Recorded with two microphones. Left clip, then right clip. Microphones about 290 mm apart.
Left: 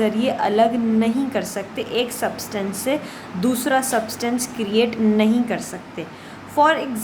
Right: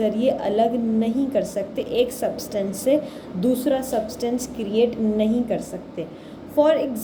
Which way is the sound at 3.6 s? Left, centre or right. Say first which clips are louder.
Left 3 dB; left.